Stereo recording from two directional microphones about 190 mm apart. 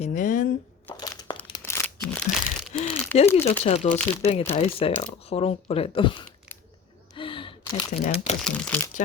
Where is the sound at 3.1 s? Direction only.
35° left (ahead or behind).